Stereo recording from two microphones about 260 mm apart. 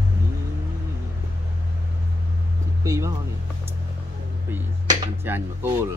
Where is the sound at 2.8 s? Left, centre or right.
Centre.